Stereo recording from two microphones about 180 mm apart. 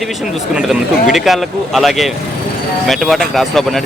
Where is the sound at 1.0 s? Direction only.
Centre (ahead or behind).